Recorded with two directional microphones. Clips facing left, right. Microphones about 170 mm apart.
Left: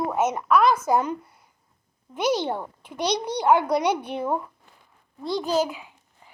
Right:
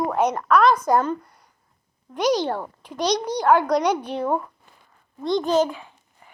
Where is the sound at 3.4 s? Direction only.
10° left (ahead or behind).